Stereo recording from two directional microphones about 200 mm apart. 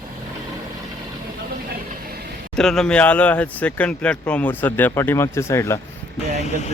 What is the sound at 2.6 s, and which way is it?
Speech, 5° left (ahead or behind).